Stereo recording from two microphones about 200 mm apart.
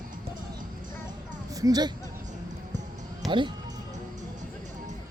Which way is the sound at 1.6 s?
20° right (ahead or behind).